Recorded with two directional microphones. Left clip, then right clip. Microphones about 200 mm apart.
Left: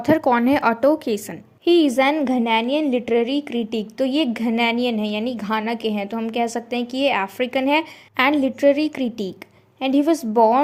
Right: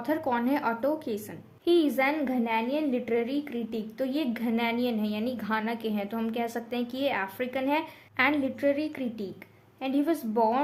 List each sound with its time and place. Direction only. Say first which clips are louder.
0.0 s a woman's voice: left 11 dB; 40° left (ahead or behind)